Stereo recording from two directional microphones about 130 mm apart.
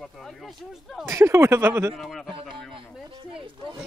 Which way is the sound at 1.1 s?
20° right (ahead or behind).